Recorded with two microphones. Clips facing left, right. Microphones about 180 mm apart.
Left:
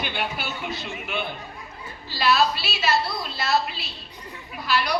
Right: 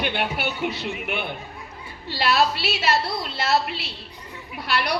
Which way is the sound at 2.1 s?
65° right (ahead or behind).